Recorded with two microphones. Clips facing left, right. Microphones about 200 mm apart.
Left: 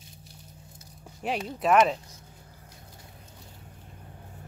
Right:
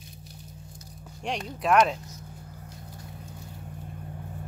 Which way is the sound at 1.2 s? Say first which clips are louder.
Left 2 dB; 5° left (ahead or behind).